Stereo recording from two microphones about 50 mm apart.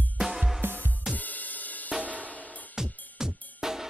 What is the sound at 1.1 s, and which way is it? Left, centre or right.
Music, left.